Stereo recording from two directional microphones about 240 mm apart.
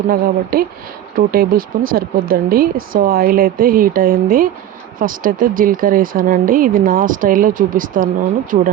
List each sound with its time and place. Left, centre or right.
0.5 s speech: right